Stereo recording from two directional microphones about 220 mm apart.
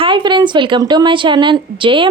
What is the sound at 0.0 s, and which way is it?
A woman's voice, 20° right (ahead or behind).